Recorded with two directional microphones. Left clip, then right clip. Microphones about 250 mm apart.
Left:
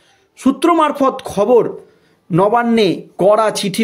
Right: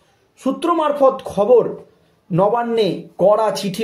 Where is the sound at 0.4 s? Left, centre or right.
Left.